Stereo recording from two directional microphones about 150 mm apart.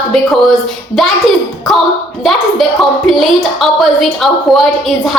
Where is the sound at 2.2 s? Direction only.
Centre (ahead or behind).